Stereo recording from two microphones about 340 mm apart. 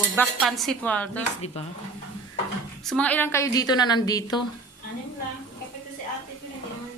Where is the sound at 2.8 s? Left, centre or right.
Centre.